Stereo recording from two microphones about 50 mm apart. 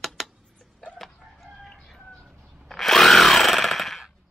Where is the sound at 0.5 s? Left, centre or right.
Centre.